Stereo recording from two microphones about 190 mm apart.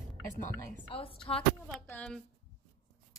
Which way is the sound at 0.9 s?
30° left (ahead or behind).